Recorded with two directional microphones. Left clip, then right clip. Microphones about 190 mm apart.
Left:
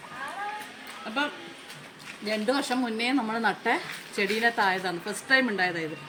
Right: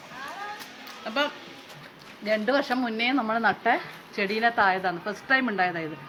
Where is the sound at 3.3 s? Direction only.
25° right (ahead or behind).